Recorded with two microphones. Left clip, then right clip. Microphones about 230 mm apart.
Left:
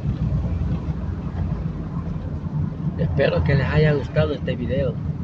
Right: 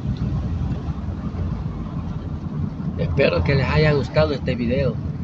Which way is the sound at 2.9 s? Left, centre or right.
Centre.